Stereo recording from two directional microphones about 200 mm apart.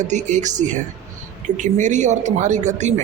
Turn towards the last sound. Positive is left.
turn(degrees=-35)  # may be behind; listen again after turning